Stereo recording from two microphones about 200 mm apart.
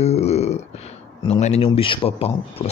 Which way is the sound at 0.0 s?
30° left (ahead or behind).